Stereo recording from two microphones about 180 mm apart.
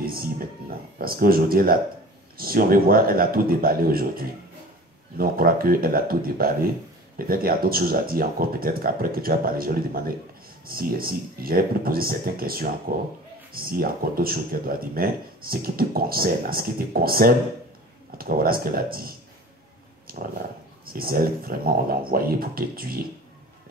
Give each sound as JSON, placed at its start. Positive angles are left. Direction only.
{"t": 0.0, "sound": "speech", "side_deg": -55}